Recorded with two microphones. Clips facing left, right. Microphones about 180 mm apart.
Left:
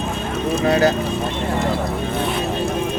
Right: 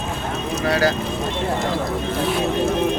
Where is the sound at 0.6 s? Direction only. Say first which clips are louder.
Left 3 dB; 20° left (ahead or behind).